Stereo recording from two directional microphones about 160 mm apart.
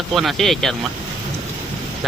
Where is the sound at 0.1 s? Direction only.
Centre (ahead or behind).